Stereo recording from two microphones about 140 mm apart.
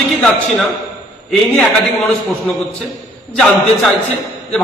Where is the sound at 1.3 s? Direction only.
5° left (ahead or behind).